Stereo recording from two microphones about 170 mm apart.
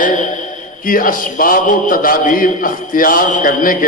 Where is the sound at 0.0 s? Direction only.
50° left (ahead or behind).